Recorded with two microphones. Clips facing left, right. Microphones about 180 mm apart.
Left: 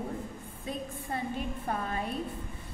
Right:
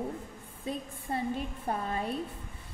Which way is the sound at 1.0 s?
30° right (ahead or behind).